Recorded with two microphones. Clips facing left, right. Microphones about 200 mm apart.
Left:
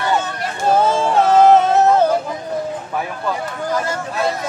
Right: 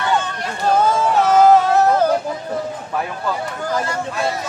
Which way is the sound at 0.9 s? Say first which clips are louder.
Left 1 dB; 25° left (ahead or behind).